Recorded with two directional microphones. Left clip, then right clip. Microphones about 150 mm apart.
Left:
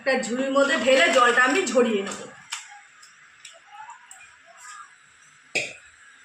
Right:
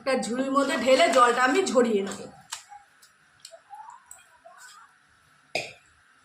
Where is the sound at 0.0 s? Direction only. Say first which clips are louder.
Left 3 dB; 10° right (ahead or behind).